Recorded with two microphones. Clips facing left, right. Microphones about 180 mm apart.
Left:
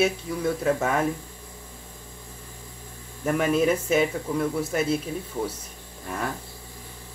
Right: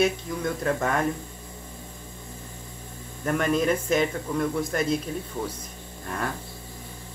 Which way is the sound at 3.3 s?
5° left (ahead or behind).